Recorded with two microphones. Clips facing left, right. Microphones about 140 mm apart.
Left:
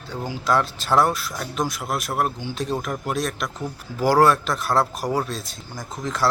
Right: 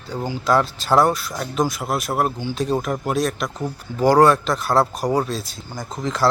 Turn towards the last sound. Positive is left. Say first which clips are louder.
# right 3 dB
turn(degrees=0)  # may be behind; listen again after turning